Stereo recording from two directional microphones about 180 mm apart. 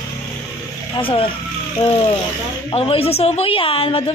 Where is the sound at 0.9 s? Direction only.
30° left (ahead or behind).